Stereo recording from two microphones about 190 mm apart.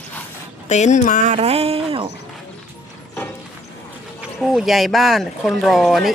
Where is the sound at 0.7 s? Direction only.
40° left (ahead or behind).